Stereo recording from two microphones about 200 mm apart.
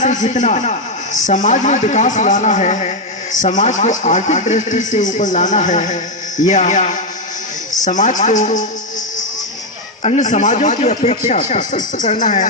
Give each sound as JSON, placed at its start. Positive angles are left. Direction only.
{"t": 0.0, "sound": "speech", "side_deg": 35}
{"t": 10.0, "sound": "speech", "side_deg": 35}